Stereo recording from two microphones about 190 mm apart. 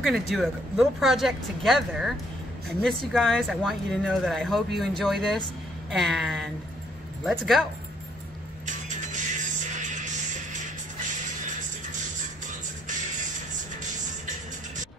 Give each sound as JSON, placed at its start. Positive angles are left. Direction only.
{"t": 0.0, "sound": "speech", "side_deg": 0}
{"t": 8.6, "sound": "music", "side_deg": -40}